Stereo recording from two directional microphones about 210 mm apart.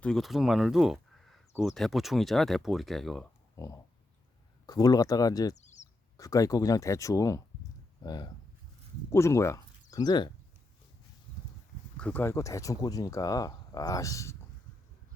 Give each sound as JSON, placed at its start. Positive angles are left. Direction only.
{"t": 0.0, "sound": "speech", "side_deg": 0}
{"t": 3.6, "sound": "speech", "side_deg": 15}
{"t": 5.5, "sound": "bird", "side_deg": 35}
{"t": 6.1, "sound": "speech", "side_deg": 15}
{"t": 11.9, "sound": "speech", "side_deg": 5}